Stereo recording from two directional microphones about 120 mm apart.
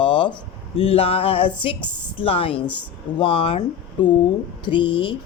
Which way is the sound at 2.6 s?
10° left (ahead or behind).